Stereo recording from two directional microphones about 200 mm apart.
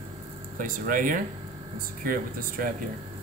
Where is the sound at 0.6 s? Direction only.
40° right (ahead or behind).